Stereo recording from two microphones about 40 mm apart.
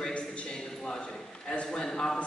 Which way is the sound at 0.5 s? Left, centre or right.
Centre.